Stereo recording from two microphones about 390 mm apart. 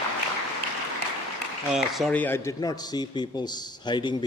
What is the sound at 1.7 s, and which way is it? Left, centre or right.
A man's voice, centre.